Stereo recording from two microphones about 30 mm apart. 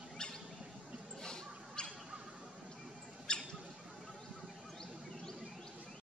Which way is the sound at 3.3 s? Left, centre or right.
Left.